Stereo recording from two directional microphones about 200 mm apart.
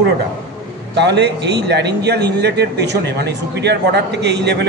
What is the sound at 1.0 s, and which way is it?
A man's voice, 60° right (ahead or behind).